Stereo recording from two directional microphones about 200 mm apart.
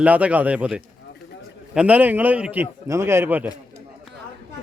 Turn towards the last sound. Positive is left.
turn(degrees=-10)  # may be behind; listen again after turning